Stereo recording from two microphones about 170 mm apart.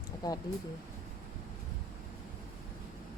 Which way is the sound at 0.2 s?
25° left (ahead or behind).